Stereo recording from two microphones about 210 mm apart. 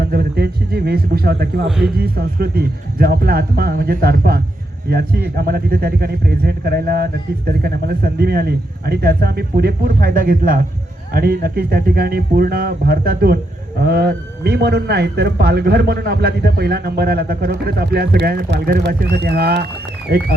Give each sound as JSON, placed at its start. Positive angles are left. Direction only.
{"t": 0.0, "sound": "speech", "side_deg": -45}
{"t": 1.6, "sound": "speech", "side_deg": 0}
{"t": 2.0, "sound": "speech", "side_deg": -45}